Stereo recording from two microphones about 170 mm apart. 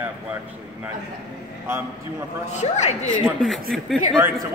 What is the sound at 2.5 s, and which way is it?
Speech, 40° left (ahead or behind).